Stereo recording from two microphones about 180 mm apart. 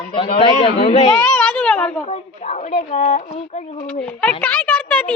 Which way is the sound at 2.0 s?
40° left (ahead or behind).